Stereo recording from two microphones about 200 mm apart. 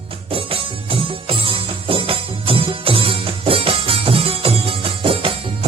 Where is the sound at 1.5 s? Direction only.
25° right (ahead or behind).